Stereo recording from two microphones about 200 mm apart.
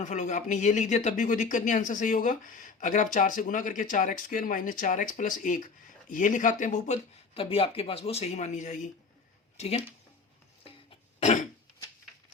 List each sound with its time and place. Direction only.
0.0 s speech: 35° left (ahead or behind)
11.2 s throat clearing: 35° left (ahead or behind)